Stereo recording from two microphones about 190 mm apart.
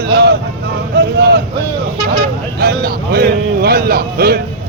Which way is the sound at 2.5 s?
55° right (ahead or behind).